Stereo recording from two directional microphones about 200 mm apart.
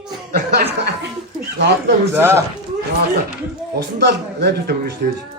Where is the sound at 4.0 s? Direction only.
55° right (ahead or behind).